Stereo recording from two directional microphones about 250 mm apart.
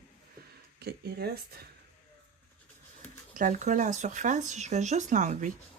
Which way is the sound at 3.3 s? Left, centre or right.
Right.